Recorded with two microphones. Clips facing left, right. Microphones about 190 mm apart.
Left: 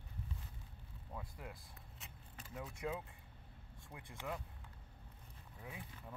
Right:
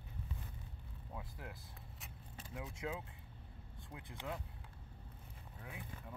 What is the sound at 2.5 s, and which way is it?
Speech, centre (ahead or behind).